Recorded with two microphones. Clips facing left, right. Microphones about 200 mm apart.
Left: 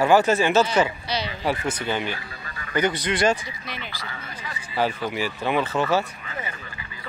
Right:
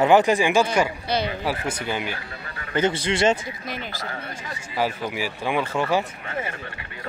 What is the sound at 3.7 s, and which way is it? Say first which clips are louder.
Speech: right 5 dB; 45° right (ahead or behind).